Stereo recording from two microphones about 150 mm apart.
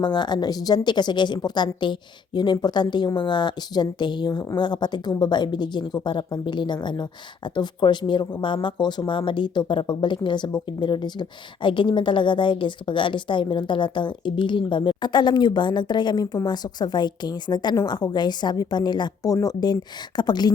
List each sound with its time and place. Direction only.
0.0 s a woman's voice: 30° left (ahead or behind)